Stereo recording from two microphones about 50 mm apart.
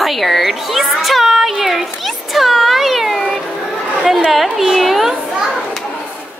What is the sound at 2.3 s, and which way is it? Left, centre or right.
Cat, centre.